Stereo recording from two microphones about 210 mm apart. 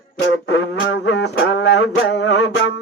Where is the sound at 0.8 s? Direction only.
60° left (ahead or behind).